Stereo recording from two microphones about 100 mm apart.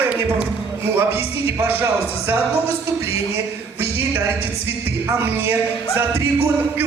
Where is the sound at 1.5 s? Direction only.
20° right (ahead or behind).